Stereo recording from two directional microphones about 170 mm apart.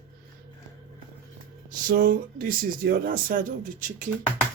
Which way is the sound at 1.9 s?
55° right (ahead or behind).